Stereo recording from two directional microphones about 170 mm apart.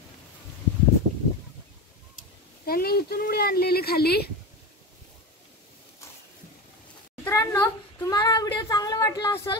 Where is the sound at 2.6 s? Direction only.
60° left (ahead or behind).